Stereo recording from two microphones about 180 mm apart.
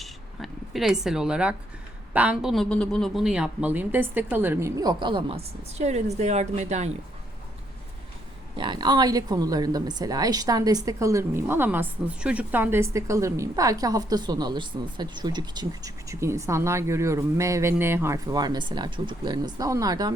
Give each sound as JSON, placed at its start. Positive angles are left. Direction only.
{"t": 0.0, "sound": "a sound", "side_deg": 0}
{"t": 2.1, "sound": "a woman's voice", "side_deg": -5}
{"t": 5.7, "sound": "a woman's voice", "side_deg": -40}
{"t": 8.5, "sound": "a woman's voice", "side_deg": -25}